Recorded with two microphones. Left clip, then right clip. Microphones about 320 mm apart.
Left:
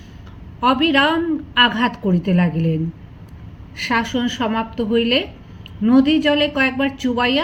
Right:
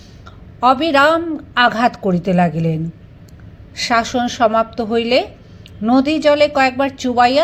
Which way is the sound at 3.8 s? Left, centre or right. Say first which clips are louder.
Right 4 dB; centre.